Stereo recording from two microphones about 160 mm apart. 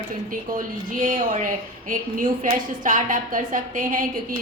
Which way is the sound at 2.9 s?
55° right (ahead or behind).